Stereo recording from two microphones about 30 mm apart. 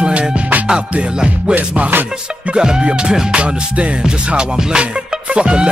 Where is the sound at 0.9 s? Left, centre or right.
Right.